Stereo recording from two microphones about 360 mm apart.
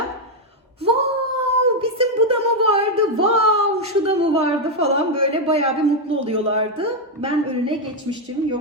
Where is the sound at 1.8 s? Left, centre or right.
Centre.